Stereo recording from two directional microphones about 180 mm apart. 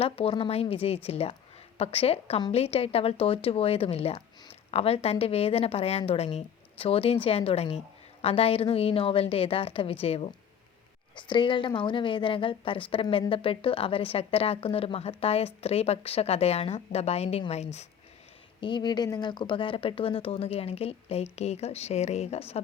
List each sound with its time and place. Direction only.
0.0 s speech: 30° left (ahead or behind)
18.6 s speech: 25° left (ahead or behind)